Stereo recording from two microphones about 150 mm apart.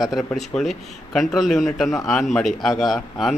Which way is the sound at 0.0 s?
Centre (ahead or behind).